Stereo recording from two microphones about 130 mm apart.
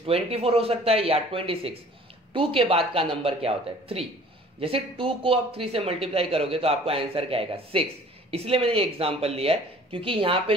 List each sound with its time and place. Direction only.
0.0 s speech: 50° right (ahead or behind)